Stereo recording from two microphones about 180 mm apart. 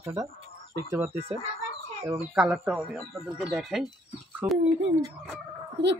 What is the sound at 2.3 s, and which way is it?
Speech, 5° right (ahead or behind).